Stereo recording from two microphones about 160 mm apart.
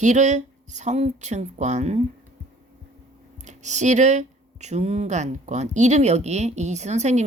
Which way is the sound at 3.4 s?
50° right (ahead or behind).